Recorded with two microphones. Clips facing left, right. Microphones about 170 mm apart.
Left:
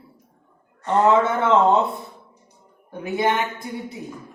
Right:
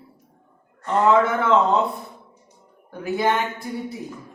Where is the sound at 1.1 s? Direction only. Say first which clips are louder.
Right 1 dB; 25° left (ahead or behind).